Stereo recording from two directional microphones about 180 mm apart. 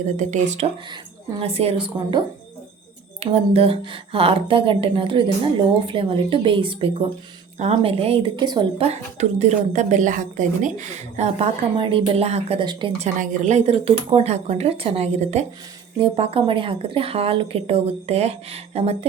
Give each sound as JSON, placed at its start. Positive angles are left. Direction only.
{"t": 0.2, "sound": "a woman's voice", "side_deg": -40}
{"t": 8.9, "sound": "a woman's voice", "side_deg": -40}
{"t": 13.1, "sound": "a woman's voice", "side_deg": -45}